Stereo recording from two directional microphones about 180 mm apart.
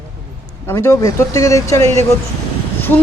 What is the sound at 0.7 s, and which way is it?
A woman's voice, 15° left (ahead or behind).